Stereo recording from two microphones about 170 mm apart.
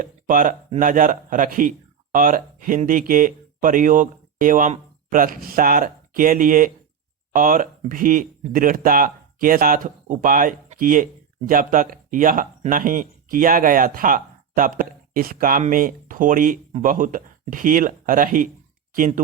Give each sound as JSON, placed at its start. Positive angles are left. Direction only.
{"t": 0.0, "sound": "a man's voice", "side_deg": -55}